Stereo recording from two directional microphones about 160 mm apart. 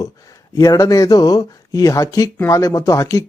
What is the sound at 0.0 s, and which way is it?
A man's voice, 20° left (ahead or behind).